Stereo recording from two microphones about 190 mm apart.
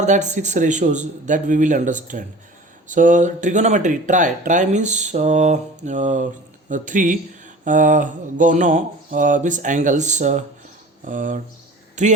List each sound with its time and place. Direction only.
0.0 s speech: 40° right (ahead or behind)
11.0 s a sound: 45° right (ahead or behind)
12.0 s a man's voice: 40° right (ahead or behind)